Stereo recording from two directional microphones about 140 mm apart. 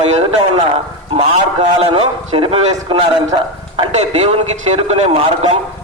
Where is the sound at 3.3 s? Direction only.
30° right (ahead or behind).